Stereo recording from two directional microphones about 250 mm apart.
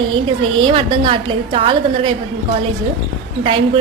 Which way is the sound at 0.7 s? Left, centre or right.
Right.